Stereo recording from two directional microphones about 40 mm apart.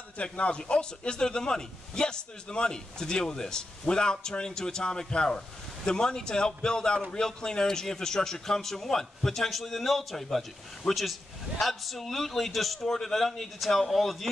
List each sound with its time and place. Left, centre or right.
0.2 s a man's voice: left; by 14.2 s centre